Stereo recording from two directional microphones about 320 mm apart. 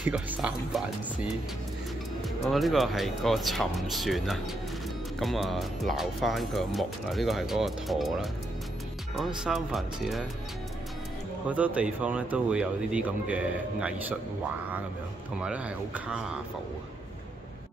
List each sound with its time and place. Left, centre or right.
0.0 s speech: centre
2.2 s speech: centre
11.4 s speech: centre
15.4 s speech: centre